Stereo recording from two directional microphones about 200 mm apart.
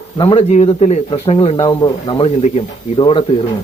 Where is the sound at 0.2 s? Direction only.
25° left (ahead or behind).